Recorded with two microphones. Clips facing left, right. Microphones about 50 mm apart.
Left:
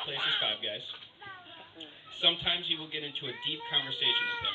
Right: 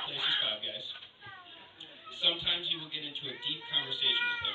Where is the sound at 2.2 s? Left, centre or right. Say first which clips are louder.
Left 2 dB; left.